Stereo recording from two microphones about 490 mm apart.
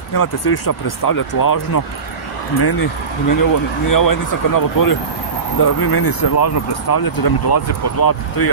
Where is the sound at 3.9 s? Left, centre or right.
Left.